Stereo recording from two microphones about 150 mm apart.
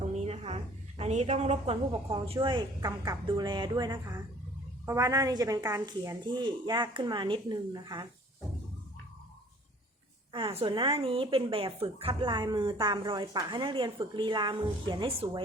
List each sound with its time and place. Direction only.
0.2 s a woman's voice: 45° right (ahead or behind); by 8.0 s 25° right (ahead or behind)
10.6 s a woman's voice: 35° right (ahead or behind)